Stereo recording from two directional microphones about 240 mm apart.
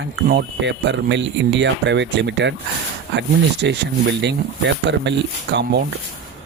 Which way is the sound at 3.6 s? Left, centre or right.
Right.